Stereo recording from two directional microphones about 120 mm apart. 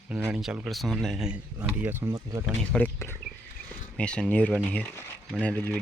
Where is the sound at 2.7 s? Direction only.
15° left (ahead or behind).